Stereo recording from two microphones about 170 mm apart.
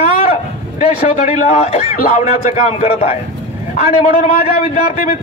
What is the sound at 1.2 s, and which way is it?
A man's voice, 40° left (ahead or behind).